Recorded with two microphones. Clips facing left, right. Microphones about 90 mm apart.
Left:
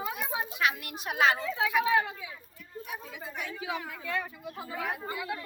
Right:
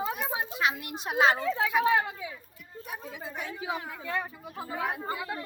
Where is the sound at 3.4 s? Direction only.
30° right (ahead or behind).